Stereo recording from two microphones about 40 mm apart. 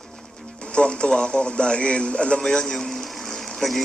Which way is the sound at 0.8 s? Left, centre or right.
Left.